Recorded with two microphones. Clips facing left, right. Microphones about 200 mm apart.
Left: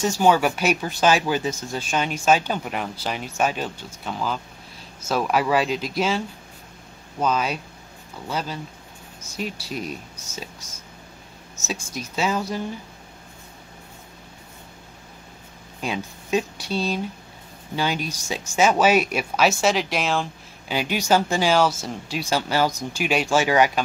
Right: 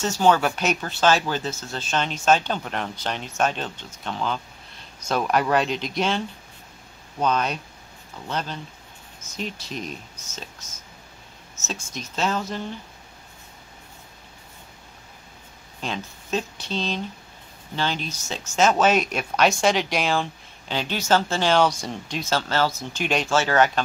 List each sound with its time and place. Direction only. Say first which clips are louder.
0.0 s speech: left 1 dB; 10° left (ahead or behind)
15.8 s speech: left 3 dB; 10° left (ahead or behind)